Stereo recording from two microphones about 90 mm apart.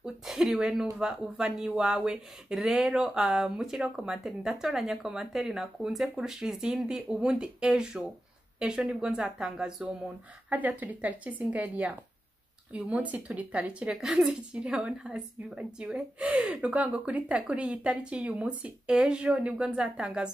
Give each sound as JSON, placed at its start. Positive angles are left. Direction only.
{"t": 0.0, "sound": "a woman's voice", "side_deg": -5}
{"t": 10.8, "sound": "a woman's voice", "side_deg": -15}